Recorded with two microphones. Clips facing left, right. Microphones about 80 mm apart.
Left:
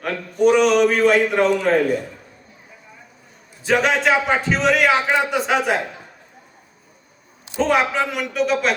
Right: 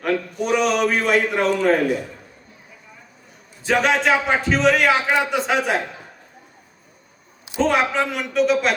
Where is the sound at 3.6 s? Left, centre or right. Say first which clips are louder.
Even; centre.